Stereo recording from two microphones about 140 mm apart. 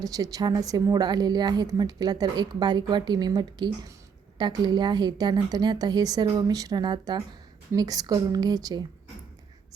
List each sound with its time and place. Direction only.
0.0 s a woman's voice: 25° right (ahead or behind)